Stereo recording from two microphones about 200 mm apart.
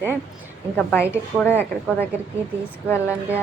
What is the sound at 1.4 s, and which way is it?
Speech, 10° left (ahead or behind).